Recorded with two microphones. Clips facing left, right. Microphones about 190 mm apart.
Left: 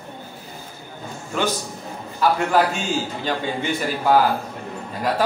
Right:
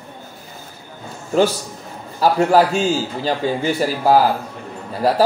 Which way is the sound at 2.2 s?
35° right (ahead or behind).